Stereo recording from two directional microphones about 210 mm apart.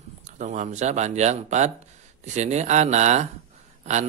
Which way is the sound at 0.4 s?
35° right (ahead or behind).